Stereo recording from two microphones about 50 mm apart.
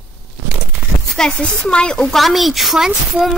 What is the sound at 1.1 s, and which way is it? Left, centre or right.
Speech, centre.